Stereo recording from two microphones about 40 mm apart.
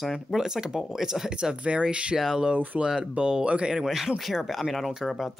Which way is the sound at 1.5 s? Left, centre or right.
Right.